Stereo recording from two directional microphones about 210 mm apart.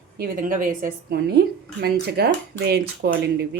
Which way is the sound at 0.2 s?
40° right (ahead or behind).